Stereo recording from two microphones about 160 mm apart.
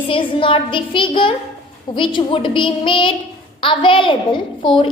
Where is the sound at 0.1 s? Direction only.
35° left (ahead or behind).